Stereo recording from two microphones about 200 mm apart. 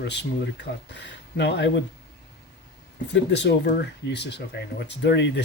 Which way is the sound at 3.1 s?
60° left (ahead or behind).